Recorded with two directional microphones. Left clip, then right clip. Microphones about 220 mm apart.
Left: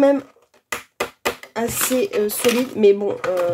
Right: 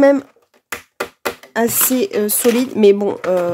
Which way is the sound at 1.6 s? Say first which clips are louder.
Right 5 dB; 45° right (ahead or behind).